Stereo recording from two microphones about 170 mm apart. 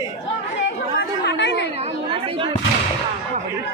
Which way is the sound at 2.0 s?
30° right (ahead or behind).